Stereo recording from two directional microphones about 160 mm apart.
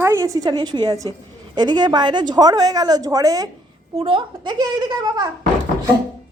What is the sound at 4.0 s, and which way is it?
A woman's voice, 30° right (ahead or behind).